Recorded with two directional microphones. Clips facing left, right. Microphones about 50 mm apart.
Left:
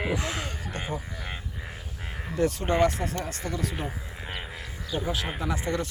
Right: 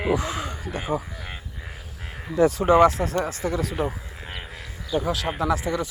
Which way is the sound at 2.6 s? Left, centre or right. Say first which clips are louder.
Right 9 dB; centre.